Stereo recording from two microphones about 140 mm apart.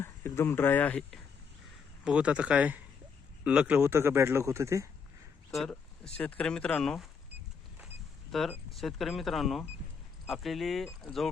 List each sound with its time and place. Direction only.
0.0 s speech: 15° left (ahead or behind)
2.0 s speech: 10° right (ahead or behind)
5.5 s speech: centre (ahead or behind)
8.3 s speech: centre (ahead or behind)